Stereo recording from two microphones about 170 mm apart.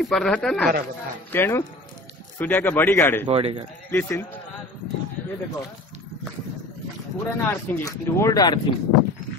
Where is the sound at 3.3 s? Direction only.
35° right (ahead or behind).